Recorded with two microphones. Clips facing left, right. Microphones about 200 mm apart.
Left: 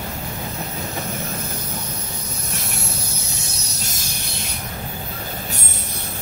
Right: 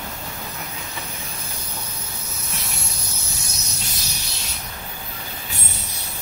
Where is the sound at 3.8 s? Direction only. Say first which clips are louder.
Left 2 dB; 50° left (ahead or behind).